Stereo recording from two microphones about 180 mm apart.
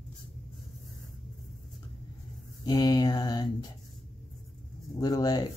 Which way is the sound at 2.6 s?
20° left (ahead or behind).